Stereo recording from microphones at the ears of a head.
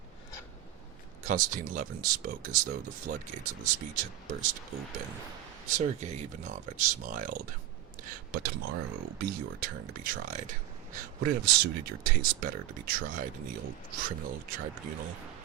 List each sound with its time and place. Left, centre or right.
1.2 s speech: right